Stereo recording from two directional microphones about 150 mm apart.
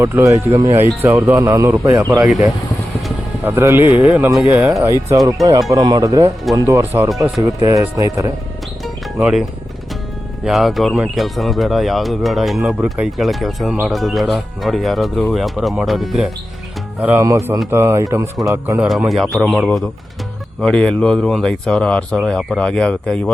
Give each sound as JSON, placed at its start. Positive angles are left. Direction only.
{"t": 0.0, "sound": "speech", "side_deg": -15}
{"t": 3.4, "sound": "speech", "side_deg": -15}
{"t": 8.8, "sound": "music", "side_deg": -5}
{"t": 10.4, "sound": "speech", "side_deg": 0}
{"t": 17.0, "sound": "speech", "side_deg": -15}
{"t": 18.9, "sound": "speech", "side_deg": 0}